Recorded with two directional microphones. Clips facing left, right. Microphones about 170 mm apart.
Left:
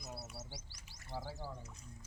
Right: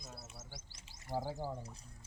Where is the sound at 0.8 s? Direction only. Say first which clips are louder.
Right 1 dB; 25° right (ahead or behind).